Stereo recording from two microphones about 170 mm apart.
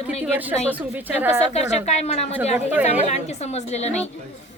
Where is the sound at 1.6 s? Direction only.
40° left (ahead or behind).